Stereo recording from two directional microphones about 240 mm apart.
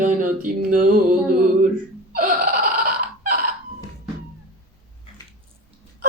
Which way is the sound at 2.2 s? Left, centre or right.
Right.